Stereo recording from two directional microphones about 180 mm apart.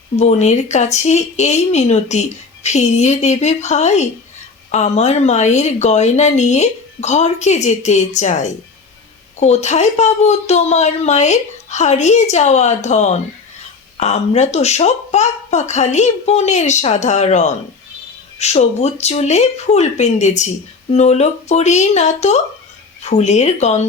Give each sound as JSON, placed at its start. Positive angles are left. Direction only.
{"t": 0.2, "sound": "speech", "side_deg": 40}